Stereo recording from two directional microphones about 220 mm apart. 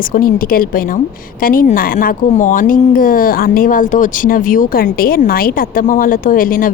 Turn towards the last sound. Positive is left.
turn(degrees=40)  # may be behind; listen again after turning